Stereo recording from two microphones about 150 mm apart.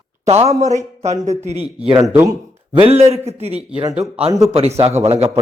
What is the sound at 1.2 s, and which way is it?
Speech, 50° right (ahead or behind).